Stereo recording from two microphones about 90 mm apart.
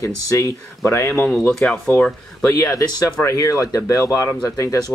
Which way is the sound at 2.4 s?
30° left (ahead or behind).